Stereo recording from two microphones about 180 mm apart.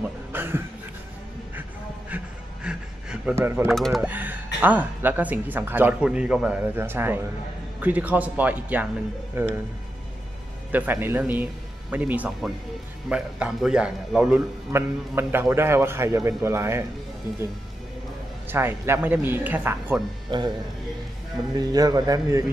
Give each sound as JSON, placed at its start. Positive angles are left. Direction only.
{"t": 0.0, "sound": "a sound", "side_deg": -10}
{"t": 3.6, "sound": "a man's voice", "side_deg": 0}
{"t": 10.7, "sound": "a man's voice", "side_deg": -10}
{"t": 18.5, "sound": "a man's voice", "side_deg": -10}
{"t": 20.2, "sound": "speech", "side_deg": -25}
{"t": 21.5, "sound": "speech", "side_deg": -20}